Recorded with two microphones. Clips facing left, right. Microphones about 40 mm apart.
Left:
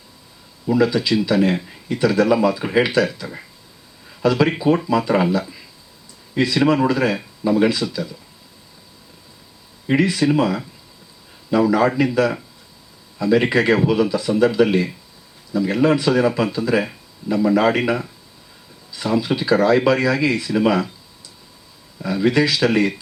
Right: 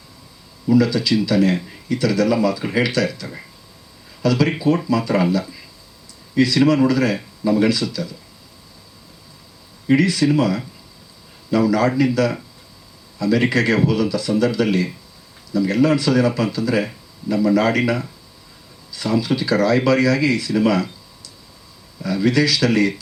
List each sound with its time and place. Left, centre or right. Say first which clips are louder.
0.7 s speech: right 1 dB; left
9.8 s speech: right 1 dB; left
22.0 s speech: even; left